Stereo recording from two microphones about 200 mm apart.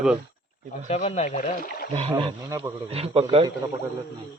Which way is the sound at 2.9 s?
30° right (ahead or behind).